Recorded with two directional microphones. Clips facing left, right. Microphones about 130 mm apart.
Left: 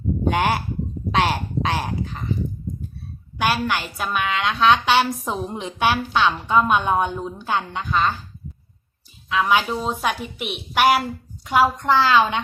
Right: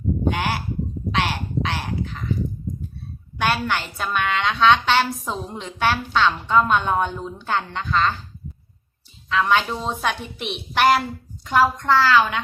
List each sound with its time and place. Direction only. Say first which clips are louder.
0.3 s speech: left 5 dB; 50° left (ahead or behind)
1.1 s a sound: left 4 dB; 45° left (ahead or behind)
3.3 s a woman's voice: left 1 dB; 5° left (ahead or behind)
9.3 s a woman's voice: even; 10° left (ahead or behind)